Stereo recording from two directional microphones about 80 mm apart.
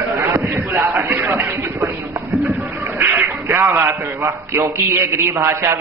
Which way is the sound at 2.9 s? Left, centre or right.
Right.